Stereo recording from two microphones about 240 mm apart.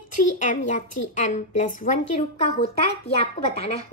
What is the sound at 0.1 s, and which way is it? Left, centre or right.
A child's voice, left.